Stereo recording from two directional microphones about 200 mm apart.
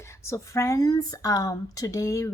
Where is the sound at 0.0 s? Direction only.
15° left (ahead or behind).